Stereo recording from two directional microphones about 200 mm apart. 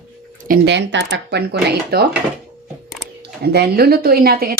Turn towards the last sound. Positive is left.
turn(degrees=-50)  # may be behind; listen again after turning